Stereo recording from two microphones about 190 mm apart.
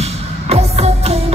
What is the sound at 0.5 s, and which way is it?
Music, 35° right (ahead or behind).